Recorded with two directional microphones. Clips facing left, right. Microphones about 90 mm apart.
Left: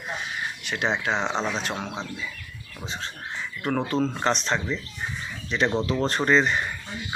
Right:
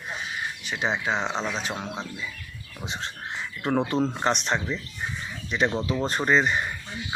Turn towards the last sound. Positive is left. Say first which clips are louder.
# left 1 dB
turn(degrees=-10)  # may be behind; listen again after turning